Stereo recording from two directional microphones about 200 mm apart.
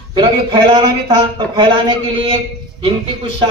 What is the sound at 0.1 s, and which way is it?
A man's voice, 25° right (ahead or behind).